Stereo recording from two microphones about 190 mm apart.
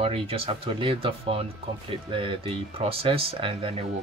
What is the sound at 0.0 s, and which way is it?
Speech, 30° right (ahead or behind).